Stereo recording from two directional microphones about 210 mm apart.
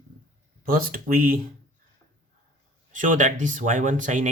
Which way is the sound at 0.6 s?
40° right (ahead or behind).